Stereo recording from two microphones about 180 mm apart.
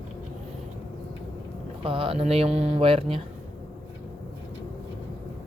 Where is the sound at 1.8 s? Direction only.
30° right (ahead or behind).